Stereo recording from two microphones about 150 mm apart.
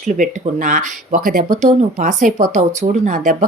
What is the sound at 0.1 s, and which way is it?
Speech, 60° right (ahead or behind).